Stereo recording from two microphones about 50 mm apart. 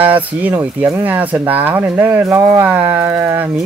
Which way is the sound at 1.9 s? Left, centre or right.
Right.